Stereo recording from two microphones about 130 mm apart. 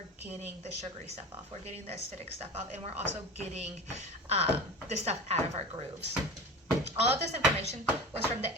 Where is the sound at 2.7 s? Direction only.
55° right (ahead or behind).